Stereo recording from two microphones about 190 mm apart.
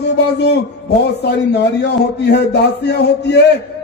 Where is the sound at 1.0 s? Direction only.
60° left (ahead or behind).